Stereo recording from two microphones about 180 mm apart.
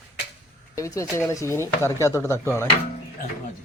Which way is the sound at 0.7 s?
15° left (ahead or behind).